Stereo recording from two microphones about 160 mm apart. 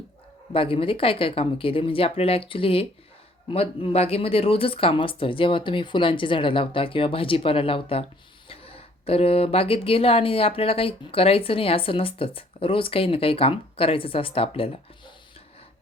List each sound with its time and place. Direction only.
0.5 s speech: 35° left (ahead or behind)